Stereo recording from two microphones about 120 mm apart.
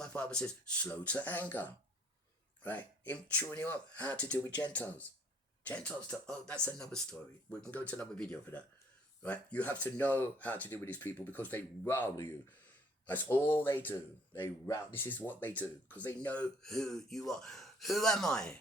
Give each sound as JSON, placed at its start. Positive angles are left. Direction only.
{"t": 0.0, "sound": "speech", "side_deg": 10}